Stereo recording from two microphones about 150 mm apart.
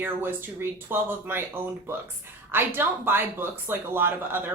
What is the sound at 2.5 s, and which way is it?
A woman's voice, 15° right (ahead or behind).